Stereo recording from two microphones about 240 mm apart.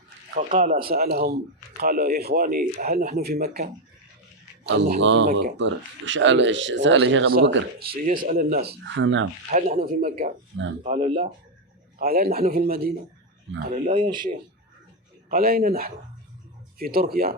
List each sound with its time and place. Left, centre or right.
0.3 s speech: right
4.9 s speech: right
5.3 s speech: right
5.5 s speech: right
9.0 s speech: right
9.5 s speech: right
11.9 s speech: right
13.9 s speech: centre
15.3 s speech: right